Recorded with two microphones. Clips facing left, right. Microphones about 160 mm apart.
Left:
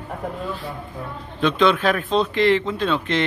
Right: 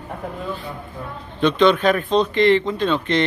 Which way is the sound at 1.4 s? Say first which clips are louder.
Right 3 dB; centre (ahead or behind).